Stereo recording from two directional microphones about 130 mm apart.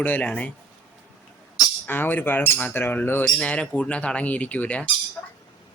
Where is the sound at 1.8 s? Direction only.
15° left (ahead or behind).